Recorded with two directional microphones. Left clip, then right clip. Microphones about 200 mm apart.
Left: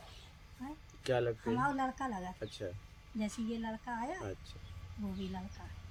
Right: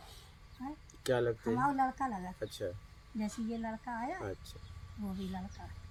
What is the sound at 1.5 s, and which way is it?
Speech, 15° right (ahead or behind).